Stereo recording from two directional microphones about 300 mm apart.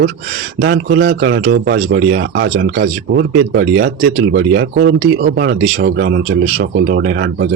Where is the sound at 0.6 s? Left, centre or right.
Right.